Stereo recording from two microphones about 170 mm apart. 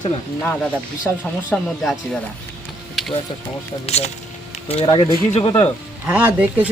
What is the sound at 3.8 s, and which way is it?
Speech, 40° left (ahead or behind).